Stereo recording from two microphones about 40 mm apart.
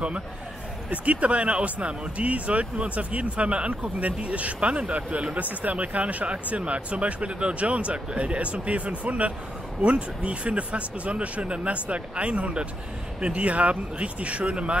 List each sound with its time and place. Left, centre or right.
0.8 s speech: right